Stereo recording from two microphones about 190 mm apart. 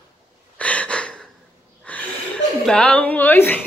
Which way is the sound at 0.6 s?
5° left (ahead or behind).